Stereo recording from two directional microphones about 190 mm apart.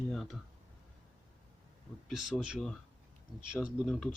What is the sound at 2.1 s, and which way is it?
Speech, centre (ahead or behind).